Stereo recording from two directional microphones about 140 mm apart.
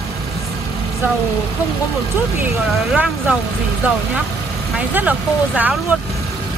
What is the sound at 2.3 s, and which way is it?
Speech, 10° right (ahead or behind).